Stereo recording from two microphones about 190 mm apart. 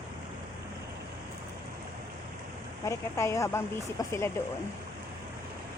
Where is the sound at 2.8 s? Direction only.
15° left (ahead or behind).